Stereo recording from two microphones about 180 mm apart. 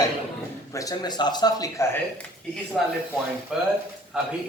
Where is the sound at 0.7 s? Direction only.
20° left (ahead or behind).